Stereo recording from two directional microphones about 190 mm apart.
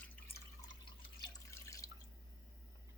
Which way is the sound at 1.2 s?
15° left (ahead or behind).